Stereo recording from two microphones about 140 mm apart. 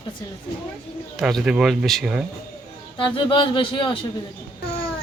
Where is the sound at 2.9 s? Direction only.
35° left (ahead or behind).